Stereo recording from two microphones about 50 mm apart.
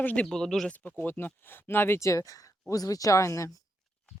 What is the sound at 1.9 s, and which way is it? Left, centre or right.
Speech, left.